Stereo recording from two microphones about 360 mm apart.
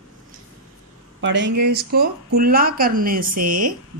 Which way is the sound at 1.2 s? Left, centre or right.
Right.